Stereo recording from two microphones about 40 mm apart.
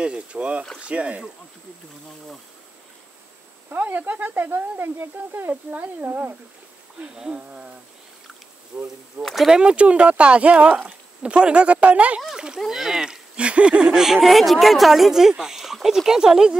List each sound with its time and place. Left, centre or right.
0.0 s speech: right
3.8 s speech: right
5.5 s speech: right
7.3 s a sound: right
8.7 s a sound: right
9.2 s speech: right
9.6 s speech: right
12.5 s speech: centre
13.4 s a sound: right
13.8 s speech: centre